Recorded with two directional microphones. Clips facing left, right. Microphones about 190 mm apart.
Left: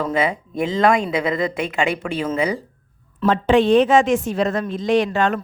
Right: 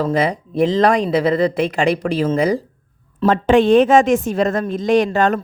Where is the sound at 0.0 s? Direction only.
35° right (ahead or behind).